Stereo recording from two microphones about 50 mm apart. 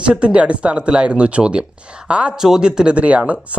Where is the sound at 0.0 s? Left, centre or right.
Right.